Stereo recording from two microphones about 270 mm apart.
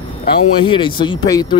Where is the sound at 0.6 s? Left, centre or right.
Centre.